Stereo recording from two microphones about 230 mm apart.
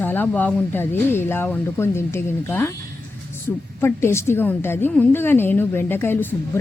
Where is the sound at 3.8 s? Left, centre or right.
Centre.